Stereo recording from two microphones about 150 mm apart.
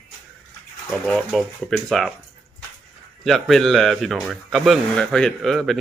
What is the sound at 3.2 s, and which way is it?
Speech, centre (ahead or behind).